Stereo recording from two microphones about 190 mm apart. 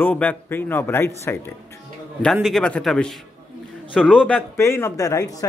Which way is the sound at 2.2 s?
Centre (ahead or behind).